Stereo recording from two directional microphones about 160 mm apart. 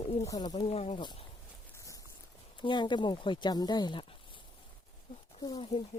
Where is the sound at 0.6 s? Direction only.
40° left (ahead or behind).